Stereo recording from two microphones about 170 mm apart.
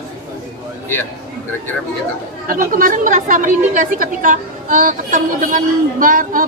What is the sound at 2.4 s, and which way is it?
A woman's voice, 55° right (ahead or behind).